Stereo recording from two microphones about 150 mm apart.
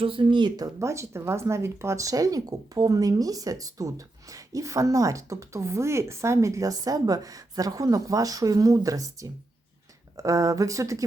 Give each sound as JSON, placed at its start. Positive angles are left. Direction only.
{"t": 0.0, "sound": "speech", "side_deg": -35}